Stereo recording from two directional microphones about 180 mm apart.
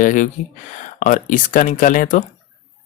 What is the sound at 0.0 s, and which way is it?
Speech, 45° left (ahead or behind).